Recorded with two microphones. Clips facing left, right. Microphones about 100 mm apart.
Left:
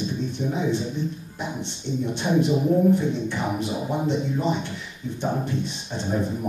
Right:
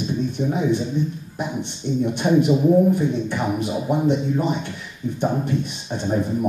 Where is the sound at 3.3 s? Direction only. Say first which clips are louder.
Right 3 dB; 15° right (ahead or behind).